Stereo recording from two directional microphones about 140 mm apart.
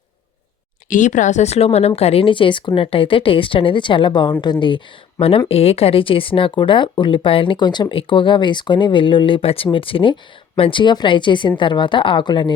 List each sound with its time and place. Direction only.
0.9 s speech: 65° left (ahead or behind); by 4.5 s 30° left (ahead or behind)
5.5 s speech: 45° left (ahead or behind)